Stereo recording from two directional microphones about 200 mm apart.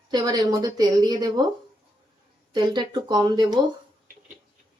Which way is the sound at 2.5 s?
20° right (ahead or behind).